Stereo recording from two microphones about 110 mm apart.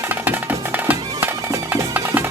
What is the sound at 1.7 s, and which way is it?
Music, 15° right (ahead or behind).